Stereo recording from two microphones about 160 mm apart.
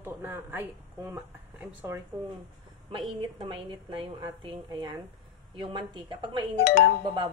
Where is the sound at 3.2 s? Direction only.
30° right (ahead or behind).